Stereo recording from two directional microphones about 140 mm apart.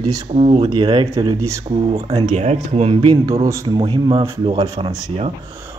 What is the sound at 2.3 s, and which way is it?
A man's voice, 50° right (ahead or behind).